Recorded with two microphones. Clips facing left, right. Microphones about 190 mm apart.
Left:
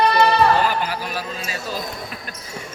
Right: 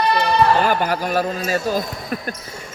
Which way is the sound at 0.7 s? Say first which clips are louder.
Right 5 dB; 50° right (ahead or behind).